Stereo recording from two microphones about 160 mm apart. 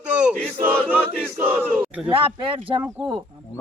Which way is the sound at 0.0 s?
10° right (ahead or behind).